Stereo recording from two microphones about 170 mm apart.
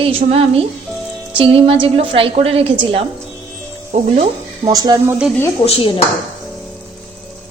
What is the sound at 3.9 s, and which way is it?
Speech, 40° right (ahead or behind).